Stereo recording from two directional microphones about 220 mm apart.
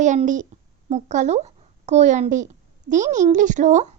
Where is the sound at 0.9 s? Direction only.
30° right (ahead or behind).